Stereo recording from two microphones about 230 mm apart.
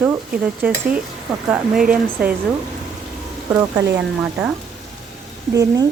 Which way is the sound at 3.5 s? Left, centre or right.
Centre.